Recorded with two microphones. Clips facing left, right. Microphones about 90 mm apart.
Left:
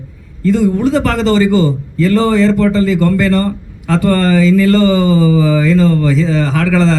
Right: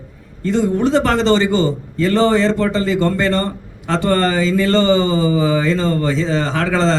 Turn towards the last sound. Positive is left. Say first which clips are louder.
# left 4 dB
turn(degrees=-25)  # may be behind; listen again after turning